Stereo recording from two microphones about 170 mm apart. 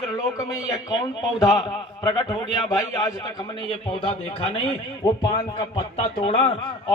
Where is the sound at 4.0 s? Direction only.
30° left (ahead or behind).